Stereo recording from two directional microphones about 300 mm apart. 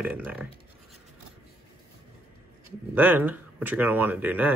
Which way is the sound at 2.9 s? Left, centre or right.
Centre.